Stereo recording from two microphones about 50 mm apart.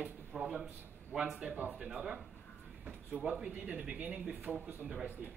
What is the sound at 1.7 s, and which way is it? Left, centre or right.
Speech, centre.